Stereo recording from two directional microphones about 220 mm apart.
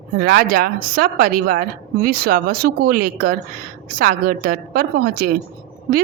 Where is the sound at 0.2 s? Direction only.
40° right (ahead or behind).